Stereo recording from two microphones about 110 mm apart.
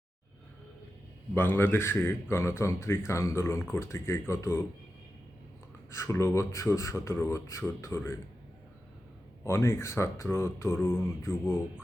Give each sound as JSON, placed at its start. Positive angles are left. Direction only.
{"t": 1.3, "sound": "speech", "side_deg": 20}
{"t": 5.9, "sound": "speech", "side_deg": 25}
{"t": 9.4, "sound": "speech", "side_deg": 25}